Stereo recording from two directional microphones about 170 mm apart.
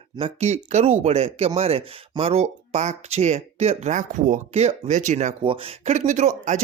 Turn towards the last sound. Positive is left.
turn(degrees=-45)  # may be behind; listen again after turning